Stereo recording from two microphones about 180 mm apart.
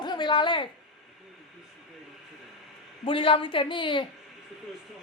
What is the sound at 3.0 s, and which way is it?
A woman's voice, 30° left (ahead or behind).